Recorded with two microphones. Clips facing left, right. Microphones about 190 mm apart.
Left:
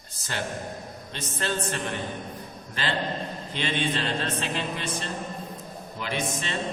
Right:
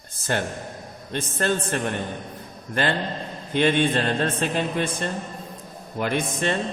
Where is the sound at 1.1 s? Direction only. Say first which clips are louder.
Right 6 dB; 50° right (ahead or behind).